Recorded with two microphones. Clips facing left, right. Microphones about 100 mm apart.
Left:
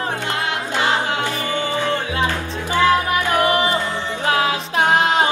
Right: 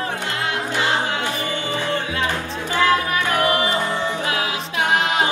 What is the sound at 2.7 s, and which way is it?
Music, 20° left (ahead or behind).